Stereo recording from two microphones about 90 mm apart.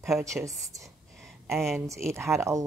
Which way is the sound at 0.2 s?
35° right (ahead or behind).